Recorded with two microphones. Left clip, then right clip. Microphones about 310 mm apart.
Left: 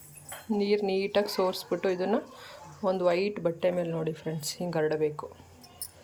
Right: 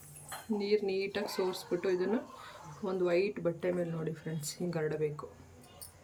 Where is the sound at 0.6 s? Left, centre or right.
Centre.